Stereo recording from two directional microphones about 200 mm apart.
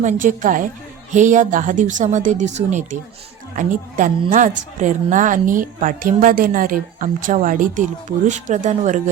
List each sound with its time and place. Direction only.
0.0 s a woman's voice: 40° right (ahead or behind)